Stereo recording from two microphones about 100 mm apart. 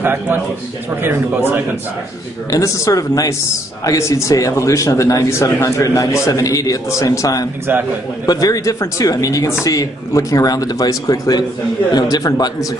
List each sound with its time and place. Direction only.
0.0 s speech: 20° right (ahead or behind)
2.5 s a man's voice: 35° left (ahead or behind)